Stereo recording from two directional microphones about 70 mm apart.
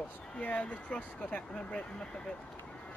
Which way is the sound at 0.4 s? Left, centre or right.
Centre.